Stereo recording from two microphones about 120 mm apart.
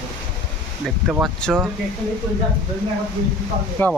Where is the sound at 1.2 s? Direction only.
5° left (ahead or behind).